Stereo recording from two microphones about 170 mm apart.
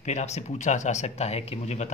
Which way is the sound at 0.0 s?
40° left (ahead or behind).